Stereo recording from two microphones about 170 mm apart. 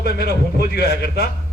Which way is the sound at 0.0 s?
70° left (ahead or behind).